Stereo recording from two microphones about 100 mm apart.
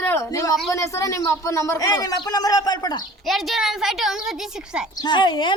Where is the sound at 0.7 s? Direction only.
30° left (ahead or behind).